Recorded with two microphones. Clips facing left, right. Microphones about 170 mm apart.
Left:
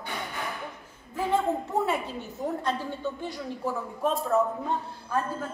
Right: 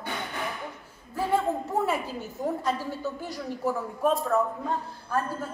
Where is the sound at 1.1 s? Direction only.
5° right (ahead or behind).